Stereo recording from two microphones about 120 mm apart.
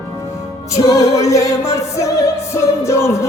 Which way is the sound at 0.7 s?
30° left (ahead or behind).